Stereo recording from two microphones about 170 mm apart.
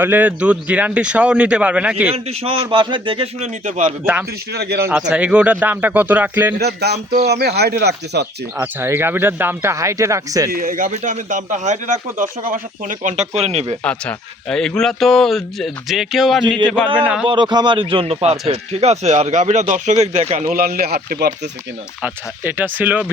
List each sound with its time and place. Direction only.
0.0 s speech: 10° right (ahead or behind)
2.0 s speech: 35° right (ahead or behind)
3.4 s speech: 50° right (ahead or behind)
4.0 s speech: 10° right (ahead or behind)
4.5 s speech: 70° right (ahead or behind)
4.9 s speech: 5° right (ahead or behind)
6.6 s speech: 75° right (ahead or behind)
8.5 s speech: 15° right (ahead or behind)
10.5 s speech: 55° right (ahead or behind); by 13.7 s 40° right (ahead or behind)
13.8 s speech: 5° left (ahead or behind)
17.2 s speech: 25° right (ahead or behind); by 21.2 s 70° right (ahead or behind)
22.0 s speech: 10° right (ahead or behind)